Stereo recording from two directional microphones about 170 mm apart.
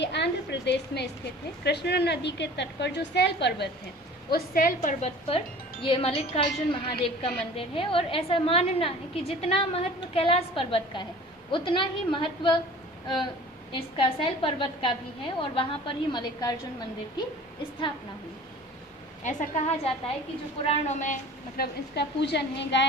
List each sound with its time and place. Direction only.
0.0 s a woman's voice: 90° left
4.3 s a woman's voice: 55° left (ahead or behind); by 12.5 s 30° left (ahead or behind)
13.7 s a woman's voice: 30° left (ahead or behind)
19.2 s a woman's voice: 45° left (ahead or behind)
21.6 s a woman's voice: 80° left